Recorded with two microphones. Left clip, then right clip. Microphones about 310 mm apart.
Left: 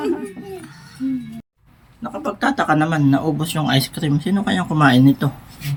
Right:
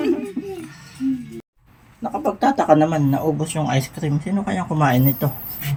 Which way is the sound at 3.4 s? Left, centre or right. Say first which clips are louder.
Left 3 dB; centre.